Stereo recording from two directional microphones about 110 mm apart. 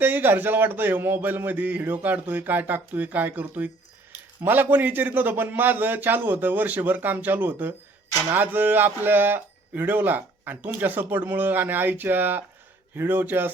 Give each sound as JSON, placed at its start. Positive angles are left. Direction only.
{"t": 0.0, "sound": "speech", "side_deg": -20}